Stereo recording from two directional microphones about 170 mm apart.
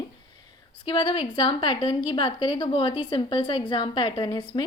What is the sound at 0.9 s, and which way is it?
A woman's voice, 30° left (ahead or behind).